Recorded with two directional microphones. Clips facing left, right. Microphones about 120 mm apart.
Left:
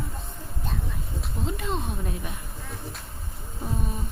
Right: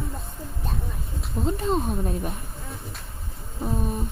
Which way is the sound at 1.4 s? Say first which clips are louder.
Right 6 dB; 35° right (ahead or behind).